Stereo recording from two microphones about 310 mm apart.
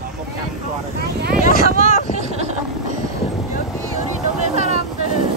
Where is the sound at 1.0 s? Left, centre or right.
Right.